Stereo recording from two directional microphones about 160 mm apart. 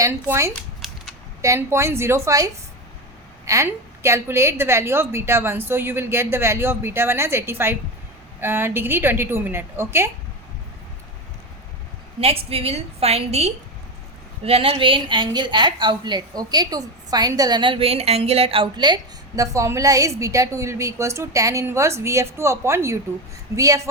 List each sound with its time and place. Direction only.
0.0 s a woman's voice: 15° right (ahead or behind)
0.8 s cap gun: centre (ahead or behind)
1.4 s a woman's voice: 20° right (ahead or behind)
12.2 s a woman's voice: 40° right (ahead or behind)
19.4 s a woman's voice: 20° right (ahead or behind)